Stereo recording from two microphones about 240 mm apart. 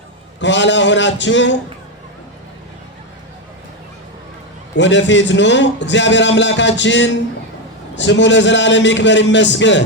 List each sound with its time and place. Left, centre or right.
0.3 s a man's voice: left
4.7 s a man's voice: left